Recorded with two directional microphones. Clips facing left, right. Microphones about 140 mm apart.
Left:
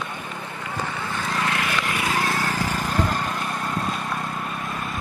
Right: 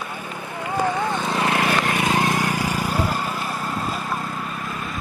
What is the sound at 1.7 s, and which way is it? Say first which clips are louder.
Vehicle: right 5 dB; 50° right (ahead or behind).